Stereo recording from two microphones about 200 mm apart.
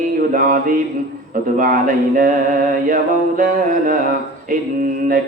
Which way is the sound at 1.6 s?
40° right (ahead or behind).